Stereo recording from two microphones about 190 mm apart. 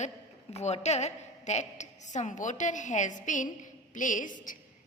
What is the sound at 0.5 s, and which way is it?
A woman's voice, 35° left (ahead or behind).